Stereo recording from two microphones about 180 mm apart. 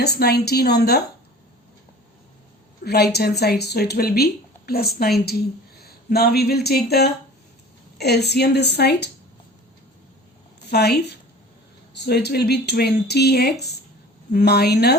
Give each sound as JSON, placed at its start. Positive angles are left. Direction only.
{"t": 0.0, "sound": "speech", "side_deg": 65}
{"t": 2.8, "sound": "a woman's voice", "side_deg": 65}
{"t": 10.7, "sound": "speech", "side_deg": 65}